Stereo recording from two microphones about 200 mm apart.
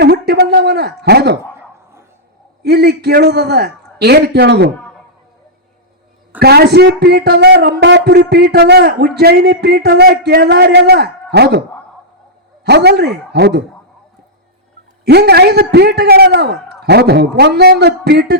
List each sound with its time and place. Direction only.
0.0 s a sound: 55° right (ahead or behind)
2.6 s a man's voice: 55° right (ahead or behind)
6.4 s speech: 55° right (ahead or behind)
12.6 s a man's voice: 55° right (ahead or behind)
15.0 s a man's voice: 55° right (ahead or behind)